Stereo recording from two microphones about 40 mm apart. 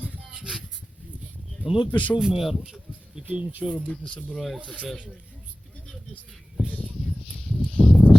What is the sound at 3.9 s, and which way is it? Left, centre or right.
Speech, left.